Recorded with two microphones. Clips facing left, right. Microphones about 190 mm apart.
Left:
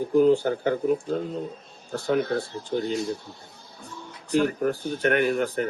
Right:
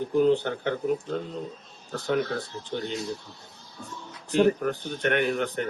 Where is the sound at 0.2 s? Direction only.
45° left (ahead or behind).